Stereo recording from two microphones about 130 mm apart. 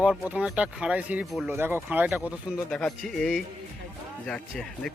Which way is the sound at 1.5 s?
15° right (ahead or behind).